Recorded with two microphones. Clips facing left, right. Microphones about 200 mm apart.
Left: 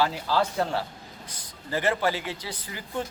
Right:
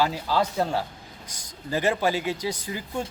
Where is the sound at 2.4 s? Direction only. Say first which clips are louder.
Right 8 dB; 45° right (ahead or behind).